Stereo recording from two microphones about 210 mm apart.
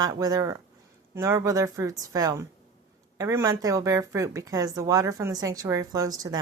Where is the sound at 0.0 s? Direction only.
20° right (ahead or behind).